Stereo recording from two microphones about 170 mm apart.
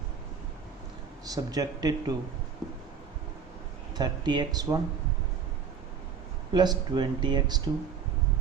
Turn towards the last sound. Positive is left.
turn(degrees=-25)  # may be behind; listen again after turning